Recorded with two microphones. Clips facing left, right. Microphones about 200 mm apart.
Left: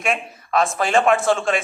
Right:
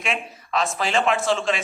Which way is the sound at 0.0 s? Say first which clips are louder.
Left 4 dB; 50° left (ahead or behind).